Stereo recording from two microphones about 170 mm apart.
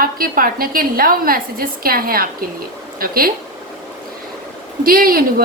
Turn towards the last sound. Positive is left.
turn(degrees=-60)  # may be behind; listen again after turning